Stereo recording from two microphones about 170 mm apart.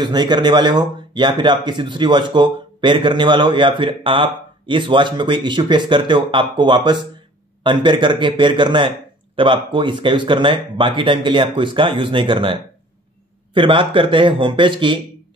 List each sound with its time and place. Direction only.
0.0 s speech: 25° right (ahead or behind)